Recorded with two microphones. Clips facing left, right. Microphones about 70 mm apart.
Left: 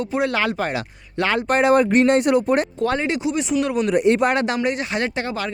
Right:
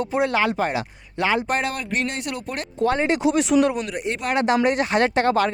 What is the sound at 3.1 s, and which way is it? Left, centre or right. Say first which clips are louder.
Speech: right 3 dB; right.